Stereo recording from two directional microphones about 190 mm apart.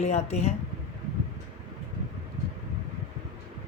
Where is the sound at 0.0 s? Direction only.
35° left (ahead or behind).